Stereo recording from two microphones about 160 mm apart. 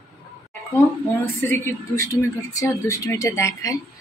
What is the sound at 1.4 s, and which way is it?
A woman's voice, 15° left (ahead or behind).